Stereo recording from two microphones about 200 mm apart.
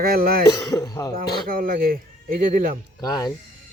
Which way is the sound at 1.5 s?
45° right (ahead or behind).